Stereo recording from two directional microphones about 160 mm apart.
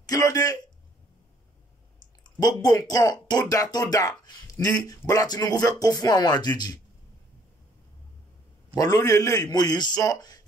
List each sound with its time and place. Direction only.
0.1 s speech: 20° left (ahead or behind)
2.4 s speech: 25° left (ahead or behind)
8.7 s a man's voice: 20° left (ahead or behind)